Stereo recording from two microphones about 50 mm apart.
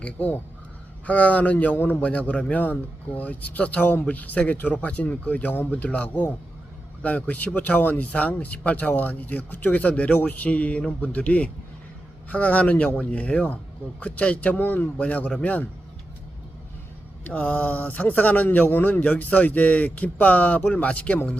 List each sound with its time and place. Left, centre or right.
0.0 s speech: left
14.6 s speech: left
14.9 s speech: left
17.2 s speech: left
19.0 s speech: left